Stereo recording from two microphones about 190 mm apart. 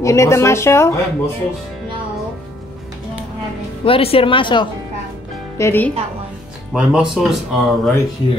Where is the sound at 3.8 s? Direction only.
30° left (ahead or behind).